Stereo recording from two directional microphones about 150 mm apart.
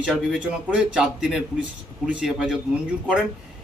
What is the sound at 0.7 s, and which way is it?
A man's voice, 5° right (ahead or behind).